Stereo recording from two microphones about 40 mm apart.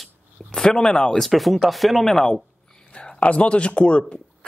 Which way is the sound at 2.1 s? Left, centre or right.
Centre.